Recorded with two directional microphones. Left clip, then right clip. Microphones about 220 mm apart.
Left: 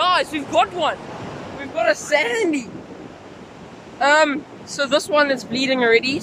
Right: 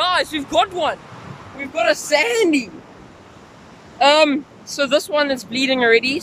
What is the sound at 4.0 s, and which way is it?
Speech, 10° right (ahead or behind).